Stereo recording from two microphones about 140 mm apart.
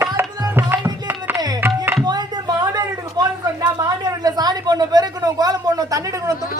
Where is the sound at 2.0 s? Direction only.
30° right (ahead or behind).